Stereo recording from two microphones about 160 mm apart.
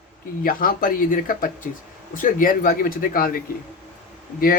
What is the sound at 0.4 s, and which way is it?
Speech, 60° left (ahead or behind).